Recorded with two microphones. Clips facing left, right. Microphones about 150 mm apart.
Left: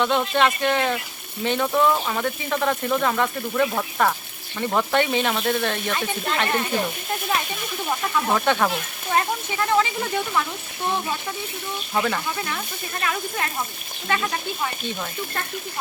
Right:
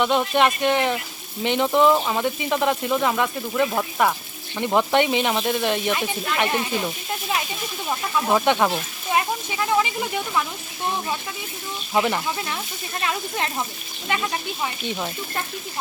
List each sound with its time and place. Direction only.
0.0 s speech: 15° right (ahead or behind)
8.3 s speech: 15° right (ahead or behind)
11.9 s speech: 20° right (ahead or behind)